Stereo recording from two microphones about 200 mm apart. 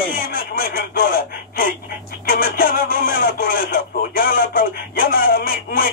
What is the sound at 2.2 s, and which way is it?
Radio, 45° left (ahead or behind).